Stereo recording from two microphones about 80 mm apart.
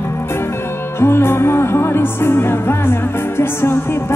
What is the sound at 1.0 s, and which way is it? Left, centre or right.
Music, left.